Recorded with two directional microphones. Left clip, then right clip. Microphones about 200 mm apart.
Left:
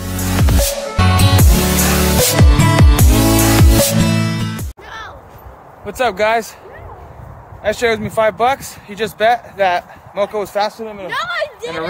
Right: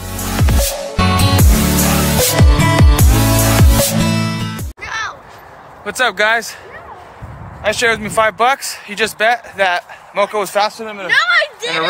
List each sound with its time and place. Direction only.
0.2 s music: centre (ahead or behind)
4.8 s crow: 15° left (ahead or behind)
5.9 s speech: centre (ahead or behind)
7.6 s speech: centre (ahead or behind)
11.1 s a sound: 25° left (ahead or behind)